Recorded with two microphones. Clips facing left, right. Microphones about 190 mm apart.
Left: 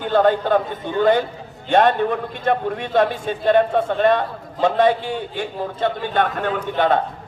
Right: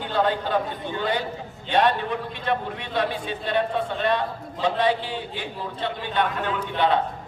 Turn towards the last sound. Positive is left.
turn(degrees=45)  # may be behind; listen again after turning